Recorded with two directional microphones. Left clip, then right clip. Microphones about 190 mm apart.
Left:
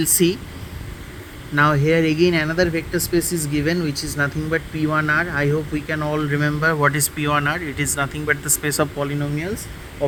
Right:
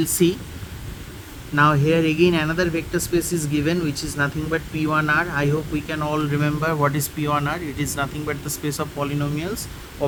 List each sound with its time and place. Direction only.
0.0 s speech: 15° left (ahead or behind)
1.5 s speech: 20° left (ahead or behind)